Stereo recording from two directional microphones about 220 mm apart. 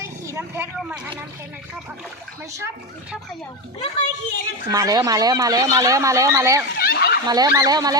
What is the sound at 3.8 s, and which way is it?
Speech, 30° left (ahead or behind).